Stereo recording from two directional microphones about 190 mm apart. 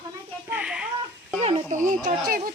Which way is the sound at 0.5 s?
5° right (ahead or behind).